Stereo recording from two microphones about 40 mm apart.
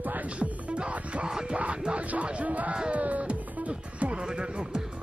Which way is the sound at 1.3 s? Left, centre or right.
Centre.